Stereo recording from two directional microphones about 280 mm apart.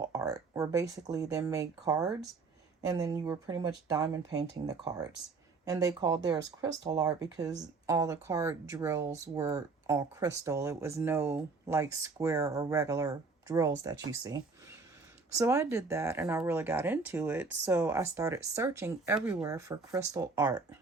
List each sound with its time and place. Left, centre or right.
0.0 s speech: centre